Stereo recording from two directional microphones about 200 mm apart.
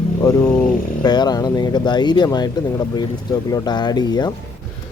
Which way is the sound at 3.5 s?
20° left (ahead or behind).